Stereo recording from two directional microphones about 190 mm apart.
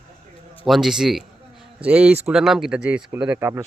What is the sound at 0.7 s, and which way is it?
Speech, centre (ahead or behind).